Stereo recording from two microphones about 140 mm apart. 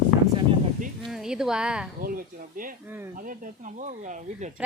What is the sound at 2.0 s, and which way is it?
Speech, 90° right.